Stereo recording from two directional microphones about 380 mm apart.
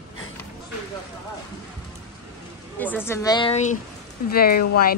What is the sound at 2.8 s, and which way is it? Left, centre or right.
A woman's voice, centre.